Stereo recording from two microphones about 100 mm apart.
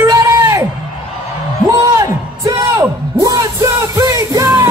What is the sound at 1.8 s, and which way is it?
Music, 30° right (ahead or behind).